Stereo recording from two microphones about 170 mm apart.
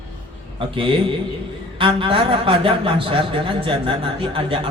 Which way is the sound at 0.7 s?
30° right (ahead or behind).